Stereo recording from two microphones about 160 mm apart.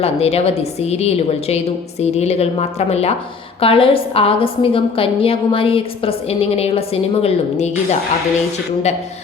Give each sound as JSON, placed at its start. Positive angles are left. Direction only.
{"t": 0.0, "sound": "a woman's voice", "side_deg": 40}